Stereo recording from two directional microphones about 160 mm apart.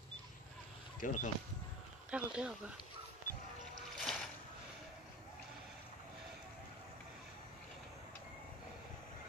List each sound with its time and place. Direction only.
1.0 s speech: 55° left (ahead or behind)
2.0 s speech: 5° right (ahead or behind)
4.0 s boat: centre (ahead or behind)